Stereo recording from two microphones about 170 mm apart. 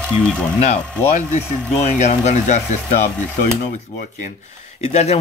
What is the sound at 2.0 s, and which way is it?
Speech, 45° left (ahead or behind).